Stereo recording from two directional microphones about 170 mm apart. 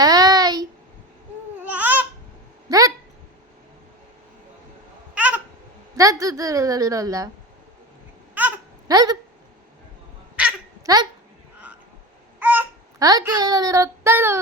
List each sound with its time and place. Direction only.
0.0 s a sound: 20° right (ahead or behind)
1.6 s babbling: 10° right (ahead or behind)
2.6 s a sound: 20° right (ahead or behind)
5.1 s babbling: 10° right (ahead or behind)
6.0 s a woman's voice: 20° right (ahead or behind)
8.4 s babbling: 10° right (ahead or behind)
8.9 s a woman's voice: 25° right (ahead or behind)
10.8 s babbling: 25° right (ahead or behind)
12.4 s babbling: 10° right (ahead or behind)
13.0 s a sound: 20° right (ahead or behind)